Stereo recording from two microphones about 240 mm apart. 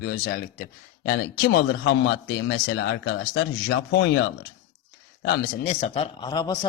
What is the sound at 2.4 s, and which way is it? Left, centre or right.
A man's voice, left.